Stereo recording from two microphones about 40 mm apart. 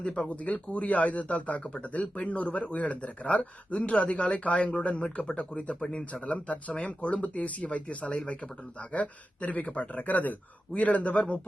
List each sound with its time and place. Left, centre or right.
0.0 s speech: left
0.3 s speech: left